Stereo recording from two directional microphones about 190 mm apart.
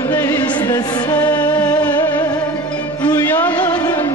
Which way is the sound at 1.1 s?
10° left (ahead or behind).